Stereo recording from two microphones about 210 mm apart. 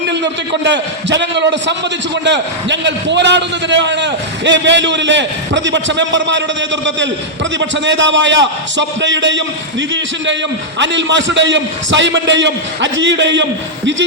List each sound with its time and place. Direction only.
0.1 s a man's voice: 55° right (ahead or behind)
10.8 s a man's voice: 60° right (ahead or behind)